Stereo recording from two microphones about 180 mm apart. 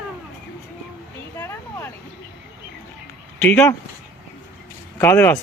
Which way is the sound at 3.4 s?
10° left (ahead or behind).